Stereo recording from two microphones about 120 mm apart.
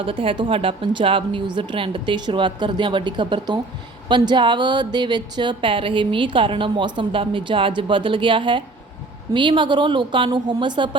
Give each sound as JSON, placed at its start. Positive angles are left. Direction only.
{"t": 0.0, "sound": "a woman's voice", "side_deg": -45}